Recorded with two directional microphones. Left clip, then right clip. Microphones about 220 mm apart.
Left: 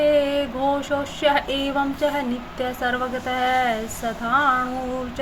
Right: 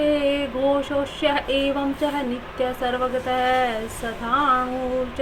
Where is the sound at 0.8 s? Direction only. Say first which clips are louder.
Left 1 dB; 40° left (ahead or behind).